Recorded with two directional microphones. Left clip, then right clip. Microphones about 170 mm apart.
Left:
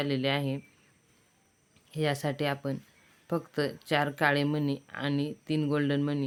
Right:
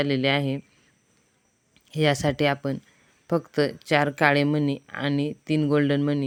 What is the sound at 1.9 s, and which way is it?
Speech, 40° right (ahead or behind).